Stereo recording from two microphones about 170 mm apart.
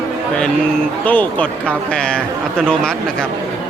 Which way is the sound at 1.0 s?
10° left (ahead or behind).